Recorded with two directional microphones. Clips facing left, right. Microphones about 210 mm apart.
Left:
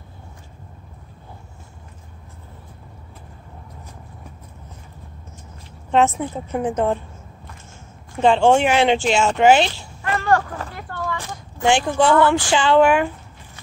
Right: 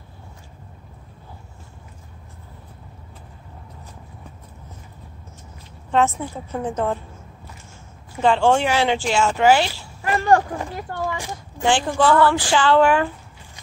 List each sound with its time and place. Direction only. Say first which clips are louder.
5.9 s a woman's voice: left 2 dB; 20° left (ahead or behind)
8.2 s a woman's voice: left 3 dB; 20° left (ahead or behind)
10.0 s speech: right 2 dB; 15° right (ahead or behind)
11.6 s a woman's voice: left 1 dB; 20° left (ahead or behind)